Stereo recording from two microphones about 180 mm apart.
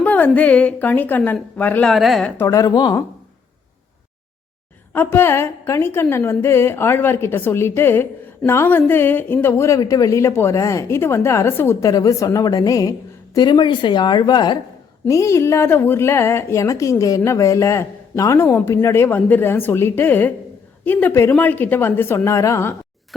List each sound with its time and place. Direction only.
0.0 s a woman's voice: 10° left (ahead or behind)
2.4 s a woman's voice: 20° left (ahead or behind)
4.9 s a woman's voice: 10° left (ahead or behind)